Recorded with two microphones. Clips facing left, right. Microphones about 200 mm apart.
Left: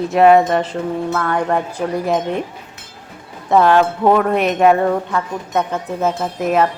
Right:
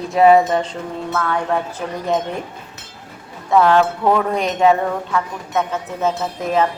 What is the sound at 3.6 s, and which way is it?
Speech, 20° left (ahead or behind).